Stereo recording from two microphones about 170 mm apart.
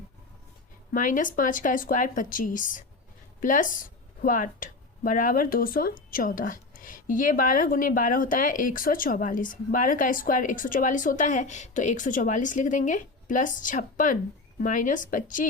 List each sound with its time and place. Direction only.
0.9 s speech: 50° left (ahead or behind)